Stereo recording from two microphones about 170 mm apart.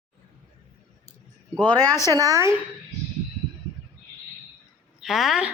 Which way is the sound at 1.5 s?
25° right (ahead or behind).